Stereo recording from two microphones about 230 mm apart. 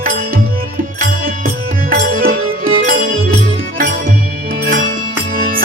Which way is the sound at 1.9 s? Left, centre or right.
Right.